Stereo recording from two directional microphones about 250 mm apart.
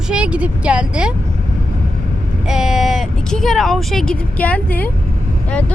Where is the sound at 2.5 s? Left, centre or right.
Centre.